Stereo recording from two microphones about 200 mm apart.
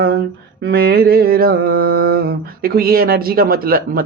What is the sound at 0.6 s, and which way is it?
Mantra, 50° right (ahead or behind).